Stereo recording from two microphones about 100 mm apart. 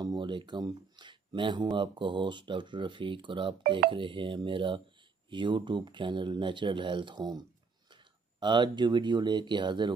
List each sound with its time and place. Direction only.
0.0 s speech: 50° right (ahead or behind)